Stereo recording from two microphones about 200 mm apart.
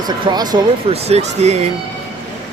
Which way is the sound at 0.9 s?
30° right (ahead or behind).